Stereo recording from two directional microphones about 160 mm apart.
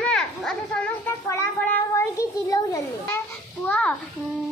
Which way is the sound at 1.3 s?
15° left (ahead or behind).